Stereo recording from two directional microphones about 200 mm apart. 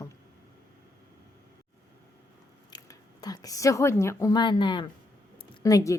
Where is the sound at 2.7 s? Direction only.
20° left (ahead or behind).